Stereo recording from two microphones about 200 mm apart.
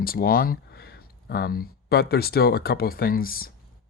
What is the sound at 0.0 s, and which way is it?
Speech, 45° left (ahead or behind).